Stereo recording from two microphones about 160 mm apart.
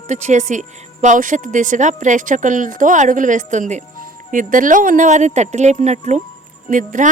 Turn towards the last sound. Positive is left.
turn(degrees=-55)  # may be behind; listen again after turning